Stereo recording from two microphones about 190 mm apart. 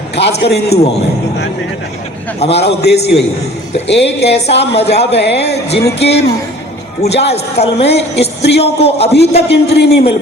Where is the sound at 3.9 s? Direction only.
65° left (ahead or behind).